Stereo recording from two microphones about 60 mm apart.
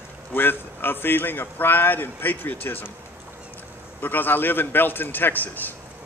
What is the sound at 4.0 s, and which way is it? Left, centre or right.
A man's voice, left.